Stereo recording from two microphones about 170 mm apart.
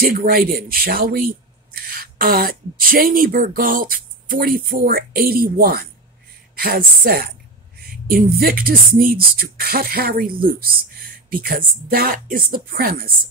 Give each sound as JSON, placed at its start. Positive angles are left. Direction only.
{"t": 0.0, "sound": "speech", "side_deg": -60}